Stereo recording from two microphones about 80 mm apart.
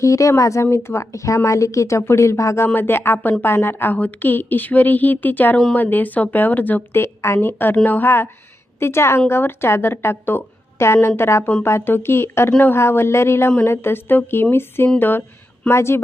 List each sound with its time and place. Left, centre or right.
0.0 s a woman's voice: left